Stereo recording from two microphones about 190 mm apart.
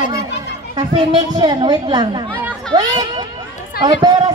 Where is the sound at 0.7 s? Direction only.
20° right (ahead or behind).